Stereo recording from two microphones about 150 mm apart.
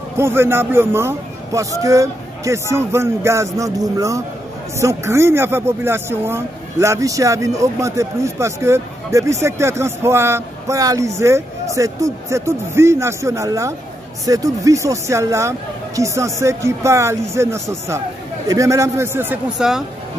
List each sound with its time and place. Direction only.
0.2 s speech: 15° right (ahead or behind)